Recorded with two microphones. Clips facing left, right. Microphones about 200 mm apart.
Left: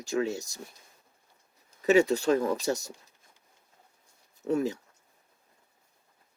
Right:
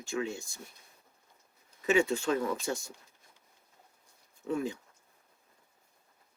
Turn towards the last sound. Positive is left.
turn(degrees=40)  # may be behind; listen again after turning